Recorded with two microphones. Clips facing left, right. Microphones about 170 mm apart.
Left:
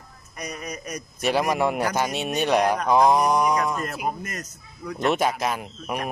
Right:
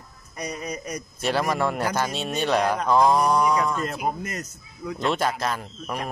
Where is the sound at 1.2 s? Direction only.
15° left (ahead or behind).